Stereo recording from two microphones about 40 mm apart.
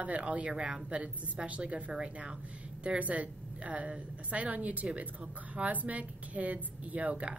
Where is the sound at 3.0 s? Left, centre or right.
Right.